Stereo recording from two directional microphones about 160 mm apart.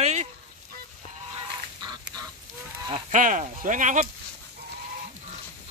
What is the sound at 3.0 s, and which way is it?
Speech, 55° right (ahead or behind).